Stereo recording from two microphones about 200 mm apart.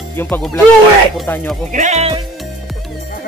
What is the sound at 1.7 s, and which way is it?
Speech, 35° right (ahead or behind).